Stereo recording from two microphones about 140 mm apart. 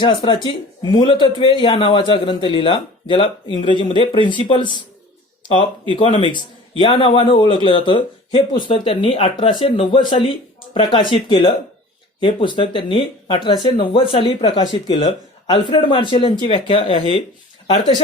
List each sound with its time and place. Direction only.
0.0 s speech: 35° left (ahead or behind)
5.9 s speech: 40° left (ahead or behind)